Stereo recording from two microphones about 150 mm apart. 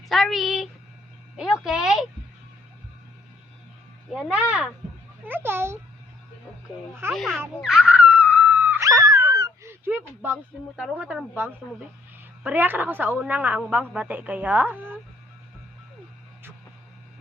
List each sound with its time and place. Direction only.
0.0 s speech: centre (ahead or behind)
4.1 s a woman's voice: 5° right (ahead or behind)
7.1 s speech: centre (ahead or behind)
7.6 s dog: 5° right (ahead or behind)
10.9 s a woman's voice: 5° right (ahead or behind)